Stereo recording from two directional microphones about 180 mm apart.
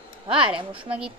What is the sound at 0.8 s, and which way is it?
Speech, 5° right (ahead or behind).